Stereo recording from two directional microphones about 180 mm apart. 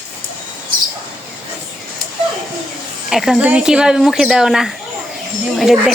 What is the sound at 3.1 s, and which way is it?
Speech, centre (ahead or behind).